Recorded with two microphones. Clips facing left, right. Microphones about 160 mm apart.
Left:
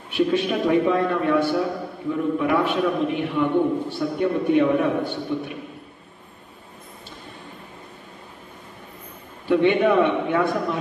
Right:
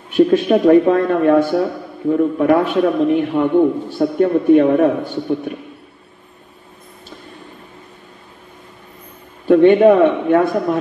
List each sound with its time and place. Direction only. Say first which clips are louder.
0.1 s speech: right 9 dB; 45° right (ahead or behind)
9.5 s speech: right 9 dB; 45° right (ahead or behind)